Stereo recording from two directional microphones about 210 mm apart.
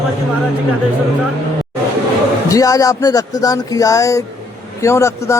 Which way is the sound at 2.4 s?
15° left (ahead or behind).